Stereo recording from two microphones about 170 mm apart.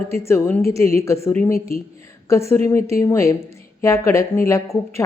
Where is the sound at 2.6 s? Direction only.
15° left (ahead or behind).